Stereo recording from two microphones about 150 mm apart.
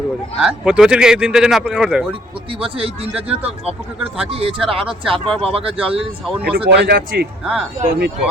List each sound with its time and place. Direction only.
0.3 s speech: 5° right (ahead or behind)
2.5 s speech: 40° right (ahead or behind)
6.7 s speech: 90° right
7.4 s speech: centre (ahead or behind)
7.8 s speech: 80° right